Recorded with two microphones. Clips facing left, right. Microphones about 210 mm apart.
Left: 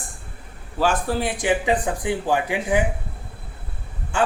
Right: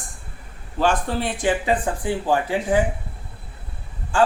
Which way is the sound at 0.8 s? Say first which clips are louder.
Even; 5° left (ahead or behind).